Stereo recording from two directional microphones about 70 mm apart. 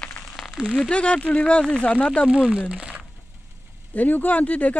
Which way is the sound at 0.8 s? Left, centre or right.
Centre.